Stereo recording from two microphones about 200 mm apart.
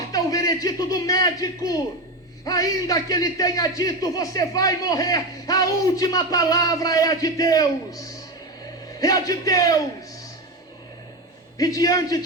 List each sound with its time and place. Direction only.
0.1 s a man's voice: 15° left (ahead or behind)
11.5 s a man's voice: 15° left (ahead or behind)